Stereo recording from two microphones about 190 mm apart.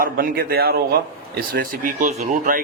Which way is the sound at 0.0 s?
50° right (ahead or behind).